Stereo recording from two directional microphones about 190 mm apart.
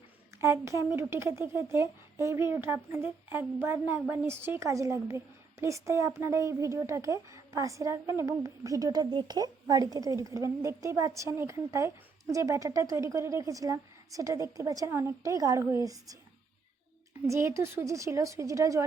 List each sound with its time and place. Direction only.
0.3 s speech: 15° right (ahead or behind)
17.2 s speech: 15° right (ahead or behind)